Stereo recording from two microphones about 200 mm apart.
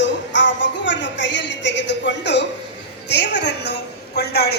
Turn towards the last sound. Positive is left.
turn(degrees=55)  # may be behind; listen again after turning